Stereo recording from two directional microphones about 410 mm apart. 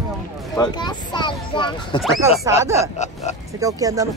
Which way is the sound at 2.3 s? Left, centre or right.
Centre.